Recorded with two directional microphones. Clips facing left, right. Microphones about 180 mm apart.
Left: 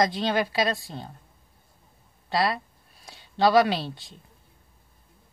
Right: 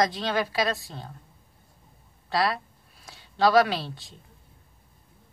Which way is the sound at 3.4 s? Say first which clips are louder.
Left 1 dB; 20° left (ahead or behind).